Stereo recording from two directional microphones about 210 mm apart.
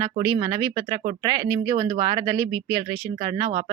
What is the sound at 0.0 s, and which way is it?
Speech, 15° right (ahead or behind).